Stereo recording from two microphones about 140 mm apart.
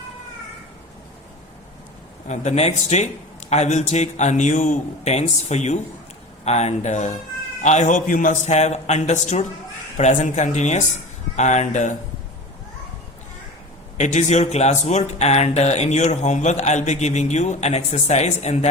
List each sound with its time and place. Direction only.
2.2 s speech: 55° left (ahead or behind)
14.0 s speech: 55° left (ahead or behind)